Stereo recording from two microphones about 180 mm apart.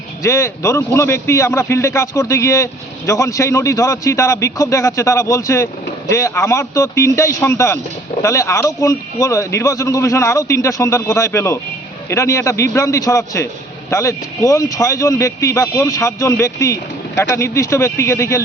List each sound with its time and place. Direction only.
0.2 s a man's voice: 15° left (ahead or behind)